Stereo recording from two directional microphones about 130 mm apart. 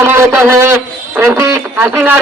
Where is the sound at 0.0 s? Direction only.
15° right (ahead or behind).